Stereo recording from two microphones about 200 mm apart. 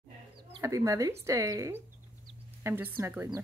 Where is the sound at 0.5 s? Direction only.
15° right (ahead or behind).